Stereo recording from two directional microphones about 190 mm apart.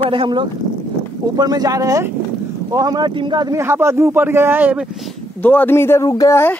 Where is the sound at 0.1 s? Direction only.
25° right (ahead or behind); by 5.1 s 5° right (ahead or behind).